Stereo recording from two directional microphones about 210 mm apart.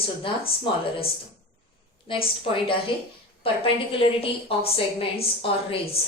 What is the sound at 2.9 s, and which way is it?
Speech, 25° left (ahead or behind).